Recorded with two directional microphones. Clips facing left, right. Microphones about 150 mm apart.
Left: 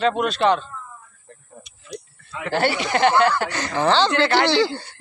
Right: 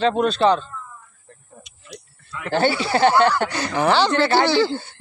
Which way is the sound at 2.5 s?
30° right (ahead or behind).